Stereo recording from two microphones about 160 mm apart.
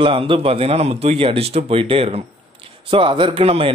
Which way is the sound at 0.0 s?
35° right (ahead or behind).